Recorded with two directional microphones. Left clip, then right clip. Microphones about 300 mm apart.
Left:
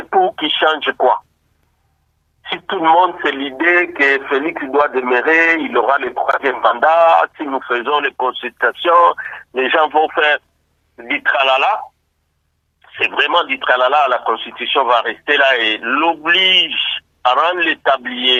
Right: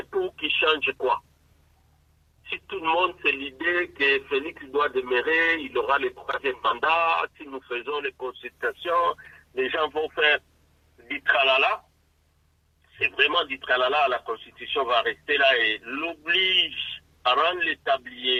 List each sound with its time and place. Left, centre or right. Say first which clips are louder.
0.1 s speech: left 13 dB; left
2.4 s speech: left 13 dB; left
12.8 s speech: left 7 dB; left